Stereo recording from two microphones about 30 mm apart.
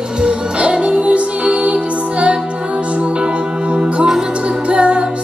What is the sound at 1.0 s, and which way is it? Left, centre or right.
Music, right.